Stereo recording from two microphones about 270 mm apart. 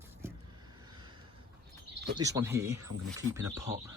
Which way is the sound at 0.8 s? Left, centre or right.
Centre.